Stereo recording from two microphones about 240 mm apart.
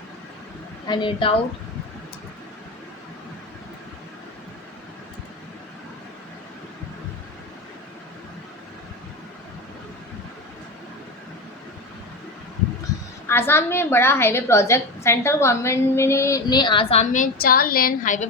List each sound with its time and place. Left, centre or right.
0.9 s a woman's voice: centre
12.9 s a sound: centre
13.2 s a woman's voice: centre; by 18.3 s left